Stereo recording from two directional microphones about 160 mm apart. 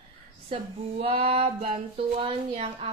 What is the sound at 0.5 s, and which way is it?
Speech, 35° right (ahead or behind).